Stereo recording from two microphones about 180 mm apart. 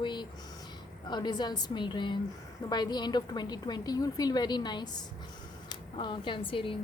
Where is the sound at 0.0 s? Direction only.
25° left (ahead or behind).